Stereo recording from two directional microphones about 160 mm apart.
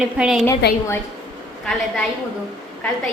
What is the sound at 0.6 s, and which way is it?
Speech, 90° left.